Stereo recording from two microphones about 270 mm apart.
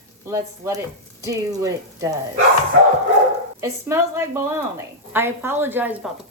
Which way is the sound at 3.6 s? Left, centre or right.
Centre.